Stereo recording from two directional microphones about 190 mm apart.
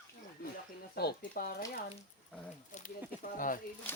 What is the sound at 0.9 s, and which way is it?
Speech, 55° left (ahead or behind).